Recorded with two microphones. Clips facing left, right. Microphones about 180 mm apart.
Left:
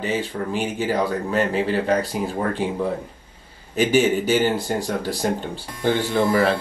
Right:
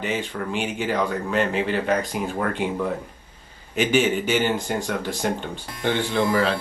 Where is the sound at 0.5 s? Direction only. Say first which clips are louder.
Left 1 dB; 40° left (ahead or behind).